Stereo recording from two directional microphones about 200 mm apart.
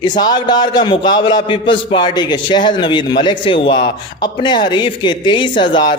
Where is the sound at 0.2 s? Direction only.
20° left (ahead or behind).